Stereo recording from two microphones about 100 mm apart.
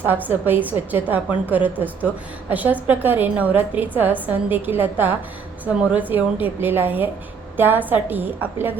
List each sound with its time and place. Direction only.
0.0 s a woman's voice: 20° right (ahead or behind)